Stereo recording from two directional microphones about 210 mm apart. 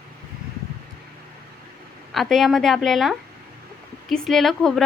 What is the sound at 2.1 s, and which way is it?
A woman's voice, centre (ahead or behind).